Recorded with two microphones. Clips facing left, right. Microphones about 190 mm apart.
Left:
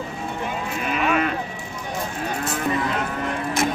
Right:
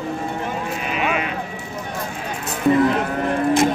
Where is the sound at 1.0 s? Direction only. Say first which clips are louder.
Left 2 dB; 45° left (ahead or behind).